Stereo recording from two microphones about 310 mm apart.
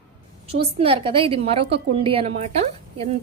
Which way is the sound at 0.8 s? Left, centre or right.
Centre.